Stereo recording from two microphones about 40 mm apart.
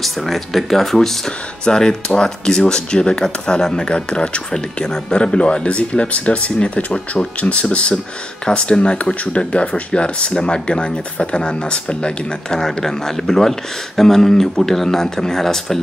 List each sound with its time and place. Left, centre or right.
0.0 s speech: centre; by 7.0 s left
7.5 s speech: left
8.5 s speech: left